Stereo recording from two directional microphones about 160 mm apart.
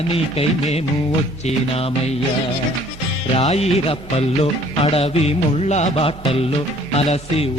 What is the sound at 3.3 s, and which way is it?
Music, 40° left (ahead or behind).